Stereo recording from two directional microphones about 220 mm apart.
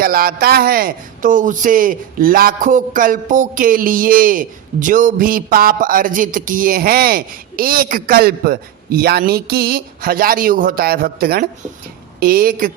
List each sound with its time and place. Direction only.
0.0 s a man's voice: 40° right (ahead or behind)